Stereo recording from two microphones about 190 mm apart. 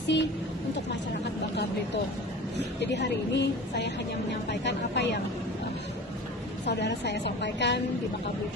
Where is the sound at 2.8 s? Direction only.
65° left (ahead or behind).